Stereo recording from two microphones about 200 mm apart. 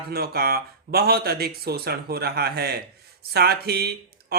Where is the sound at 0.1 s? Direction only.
50° right (ahead or behind).